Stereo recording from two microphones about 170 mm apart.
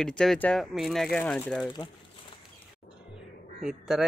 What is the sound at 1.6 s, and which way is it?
Speech, 25° left (ahead or behind).